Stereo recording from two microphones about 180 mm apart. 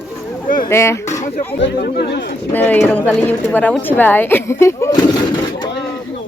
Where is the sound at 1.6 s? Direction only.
65° left (ahead or behind).